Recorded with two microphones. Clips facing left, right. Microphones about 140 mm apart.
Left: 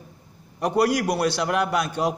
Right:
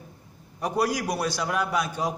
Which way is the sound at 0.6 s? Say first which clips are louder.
Left 5 dB; 70° left (ahead or behind).